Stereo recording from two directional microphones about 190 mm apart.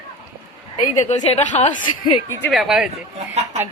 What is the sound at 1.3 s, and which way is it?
Speech, 35° left (ahead or behind).